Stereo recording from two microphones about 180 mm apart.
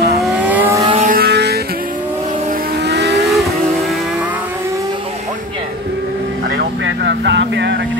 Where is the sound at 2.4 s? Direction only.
50° right (ahead or behind); by 3.3 s 70° right (ahead or behind).